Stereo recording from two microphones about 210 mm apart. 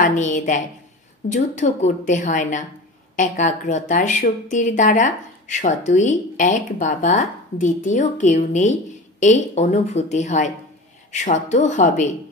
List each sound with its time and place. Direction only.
0.0 s a woman's voice: 35° left (ahead or behind)